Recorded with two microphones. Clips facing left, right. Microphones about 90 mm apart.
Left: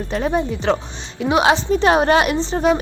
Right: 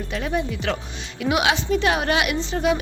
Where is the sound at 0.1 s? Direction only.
35° left (ahead or behind).